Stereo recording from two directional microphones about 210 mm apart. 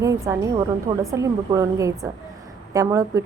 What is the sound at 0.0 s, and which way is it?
A woman's voice, 15° right (ahead or behind).